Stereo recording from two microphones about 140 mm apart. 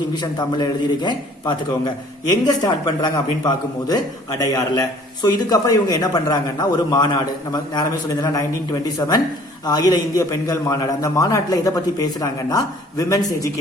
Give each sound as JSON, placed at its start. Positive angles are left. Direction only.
{"t": 0.2, "sound": "a man's voice", "side_deg": 30}